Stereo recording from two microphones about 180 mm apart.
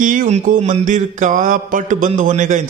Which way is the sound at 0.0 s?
45° right (ahead or behind).